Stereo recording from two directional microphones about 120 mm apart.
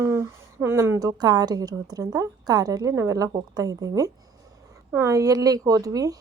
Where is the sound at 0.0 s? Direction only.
20° right (ahead or behind).